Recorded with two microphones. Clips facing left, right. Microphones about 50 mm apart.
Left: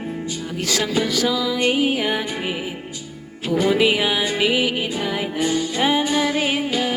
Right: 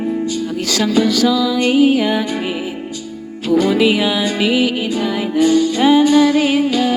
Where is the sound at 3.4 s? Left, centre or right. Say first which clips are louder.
Right 4 dB; left.